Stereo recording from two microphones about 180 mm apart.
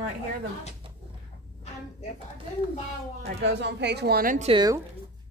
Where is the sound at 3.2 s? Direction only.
75° right (ahead or behind); by 4.3 s 60° right (ahead or behind).